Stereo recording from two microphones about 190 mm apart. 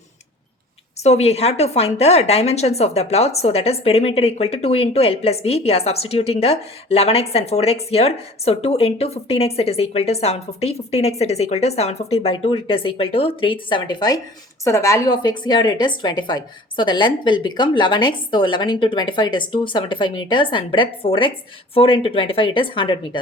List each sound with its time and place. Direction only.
1.0 s a woman's voice: 35° left (ahead or behind)